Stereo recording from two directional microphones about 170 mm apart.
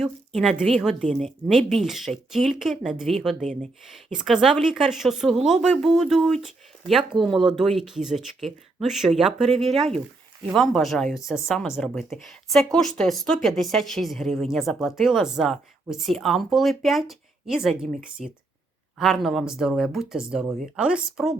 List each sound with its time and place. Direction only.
0.0 s a woman's voice: centre (ahead or behind)
3.4 s speech: 45° right (ahead or behind)
3.9 s speech: centre (ahead or behind)